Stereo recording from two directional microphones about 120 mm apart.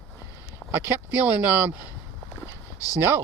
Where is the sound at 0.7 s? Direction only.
15° right (ahead or behind).